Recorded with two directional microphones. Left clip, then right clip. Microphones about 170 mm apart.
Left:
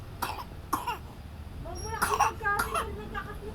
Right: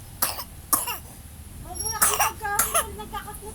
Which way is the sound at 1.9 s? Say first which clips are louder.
Right 2 dB; 25° right (ahead or behind).